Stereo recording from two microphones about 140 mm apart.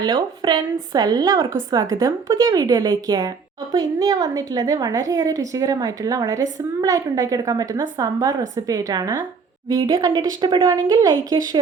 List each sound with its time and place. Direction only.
0.0 s a woman's voice: 30° right (ahead or behind)